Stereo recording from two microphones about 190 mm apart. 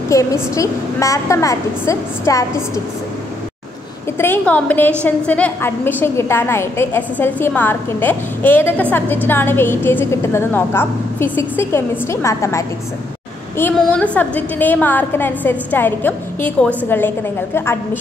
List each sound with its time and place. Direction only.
0.1 s a woman's voice: 15° left (ahead or behind)
4.2 s a woman's voice: 10° left (ahead or behind)